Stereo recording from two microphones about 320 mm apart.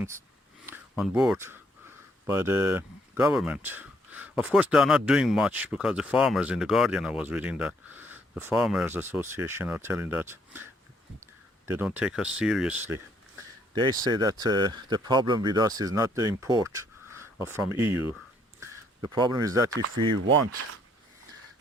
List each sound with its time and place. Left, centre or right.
0.6 s speech: centre
18.6 s speech: centre